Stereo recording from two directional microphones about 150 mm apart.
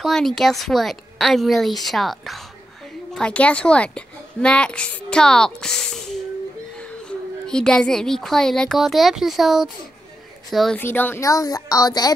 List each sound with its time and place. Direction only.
0.0 s a woman's voice: 5° left (ahead or behind)
10.8 s speech: 15° left (ahead or behind)